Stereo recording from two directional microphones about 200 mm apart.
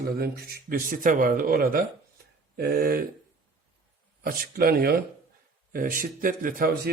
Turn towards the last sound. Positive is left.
turn(degrees=-50)  # may be behind; listen again after turning